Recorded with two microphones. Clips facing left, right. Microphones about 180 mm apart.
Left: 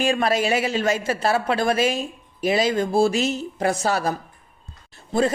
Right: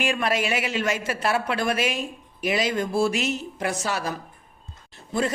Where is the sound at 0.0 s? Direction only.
30° left (ahead or behind).